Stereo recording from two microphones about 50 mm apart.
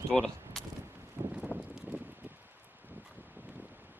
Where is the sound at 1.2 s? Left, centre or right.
Right.